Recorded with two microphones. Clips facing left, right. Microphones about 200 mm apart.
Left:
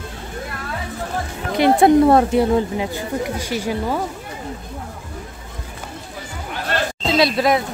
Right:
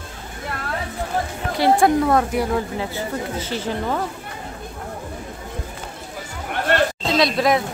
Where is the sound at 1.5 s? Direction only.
20° left (ahead or behind).